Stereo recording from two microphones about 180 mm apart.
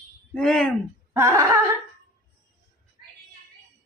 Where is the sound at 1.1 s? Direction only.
15° right (ahead or behind).